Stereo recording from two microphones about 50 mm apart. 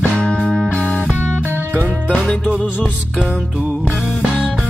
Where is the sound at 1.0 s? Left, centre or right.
Right.